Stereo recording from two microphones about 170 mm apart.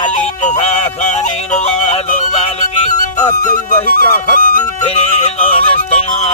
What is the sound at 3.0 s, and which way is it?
Music, 45° left (ahead or behind).